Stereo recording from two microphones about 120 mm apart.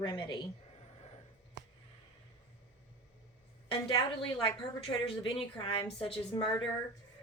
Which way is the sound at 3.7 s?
45° left (ahead or behind).